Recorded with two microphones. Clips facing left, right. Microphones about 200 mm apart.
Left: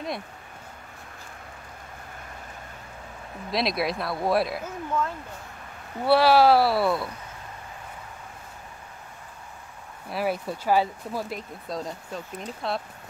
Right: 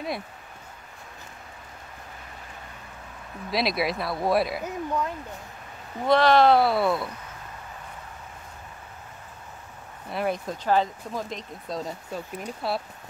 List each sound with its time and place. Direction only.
3.5 s speech: centre (ahead or behind)
4.6 s speech: 15° right (ahead or behind)
6.0 s speech: 10° left (ahead or behind)
10.0 s speech: 5° left (ahead or behind)